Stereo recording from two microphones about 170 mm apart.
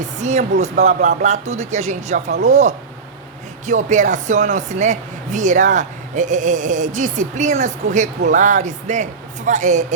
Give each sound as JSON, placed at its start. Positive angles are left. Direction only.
{"t": 0.0, "sound": "speech", "side_deg": -45}